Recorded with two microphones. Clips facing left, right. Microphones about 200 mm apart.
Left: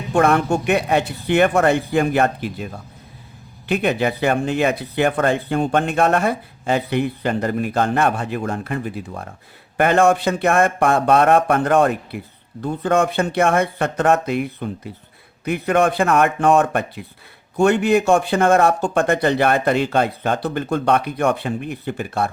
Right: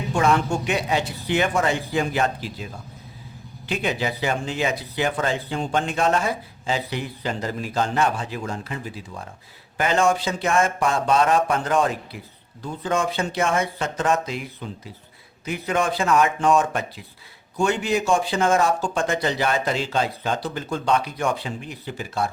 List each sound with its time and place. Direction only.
0.1 s speech: 60° left (ahead or behind)
3.7 s speech: 60° left (ahead or behind)